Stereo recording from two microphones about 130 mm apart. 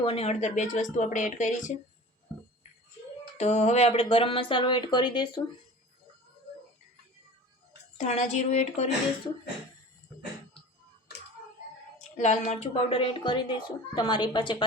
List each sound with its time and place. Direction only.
0.0 s speech: 50° left (ahead or behind); by 1.8 s 75° left (ahead or behind)
3.3 s speech: 60° left (ahead or behind); by 5.4 s 35° left (ahead or behind)
7.9 s speech: 60° left (ahead or behind)
11.9 s speech: 60° left (ahead or behind)
12.7 s a woman's voice: 45° left (ahead or behind)